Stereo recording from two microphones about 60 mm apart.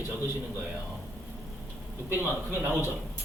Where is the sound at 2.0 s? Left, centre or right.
Right.